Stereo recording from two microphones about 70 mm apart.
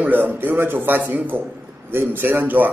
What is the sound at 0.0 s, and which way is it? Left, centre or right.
A man's voice, right.